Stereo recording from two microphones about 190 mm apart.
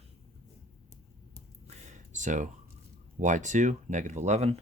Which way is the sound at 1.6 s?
40° right (ahead or behind).